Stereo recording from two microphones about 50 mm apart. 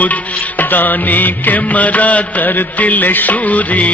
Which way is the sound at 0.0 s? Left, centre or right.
Left.